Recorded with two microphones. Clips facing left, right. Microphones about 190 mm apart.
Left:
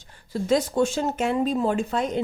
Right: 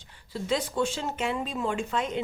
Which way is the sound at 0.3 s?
45° left (ahead or behind).